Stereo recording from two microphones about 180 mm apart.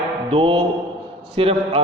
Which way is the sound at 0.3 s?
30° right (ahead or behind).